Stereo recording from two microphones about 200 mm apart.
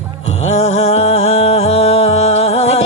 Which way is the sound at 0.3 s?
35° left (ahead or behind).